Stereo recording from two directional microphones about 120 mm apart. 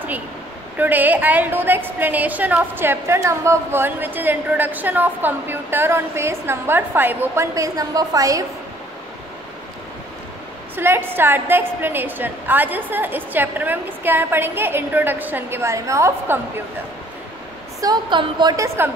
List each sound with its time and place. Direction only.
0.7 s a woman's voice: 15° right (ahead or behind)
10.8 s a woman's voice: 20° right (ahead or behind)
17.7 s a woman's voice: 35° right (ahead or behind)